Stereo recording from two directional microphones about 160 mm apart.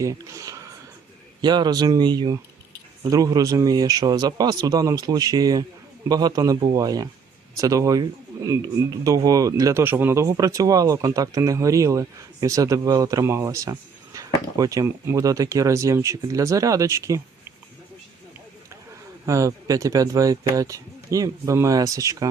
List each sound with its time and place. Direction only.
0.0 s a sound: 20° right (ahead or behind)
1.4 s speech: 25° right (ahead or behind)
19.2 s speech: 20° right (ahead or behind)